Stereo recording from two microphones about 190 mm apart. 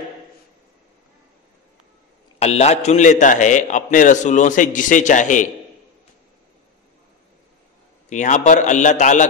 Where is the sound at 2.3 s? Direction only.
35° left (ahead or behind).